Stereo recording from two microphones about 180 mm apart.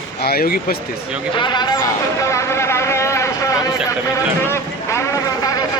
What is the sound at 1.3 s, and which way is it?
Speech, 25° left (ahead or behind).